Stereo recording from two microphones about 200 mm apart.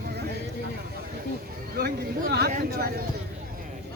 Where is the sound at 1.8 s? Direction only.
50° right (ahead or behind).